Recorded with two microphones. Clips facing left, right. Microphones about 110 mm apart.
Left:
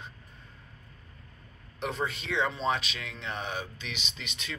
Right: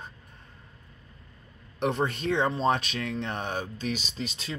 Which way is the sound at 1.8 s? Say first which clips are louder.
Right 6 dB; 60° right (ahead or behind).